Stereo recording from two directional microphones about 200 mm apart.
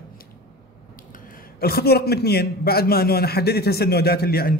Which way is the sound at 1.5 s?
50° left (ahead or behind).